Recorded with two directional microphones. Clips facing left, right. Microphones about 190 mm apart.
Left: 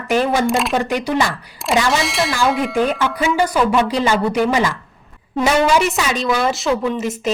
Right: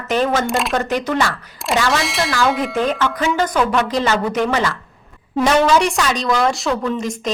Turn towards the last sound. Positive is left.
turn(degrees=5)  # may be behind; listen again after turning